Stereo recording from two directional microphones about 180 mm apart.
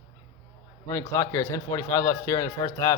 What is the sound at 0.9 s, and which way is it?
A man's voice, 15° left (ahead or behind).